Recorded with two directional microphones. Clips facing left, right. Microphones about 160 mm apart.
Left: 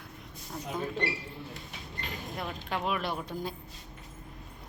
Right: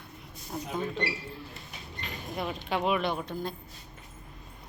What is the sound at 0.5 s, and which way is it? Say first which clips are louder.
Speech: right 3 dB; 20° right (ahead or behind).